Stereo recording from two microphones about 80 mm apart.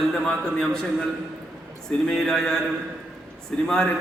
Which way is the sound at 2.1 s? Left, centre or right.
Centre.